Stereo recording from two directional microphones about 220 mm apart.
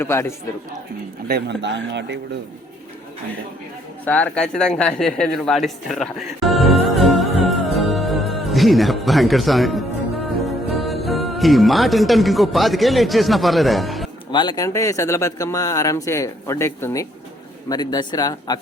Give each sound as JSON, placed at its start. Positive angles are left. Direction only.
{"t": 0.0, "sound": "speech", "side_deg": 10}
{"t": 1.3, "sound": "speech", "side_deg": -50}
{"t": 4.0, "sound": "speech", "side_deg": 5}
{"t": 14.3, "sound": "speech", "side_deg": 20}